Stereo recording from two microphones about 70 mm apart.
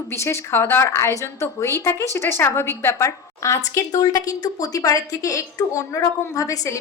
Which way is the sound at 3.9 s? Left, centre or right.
Left.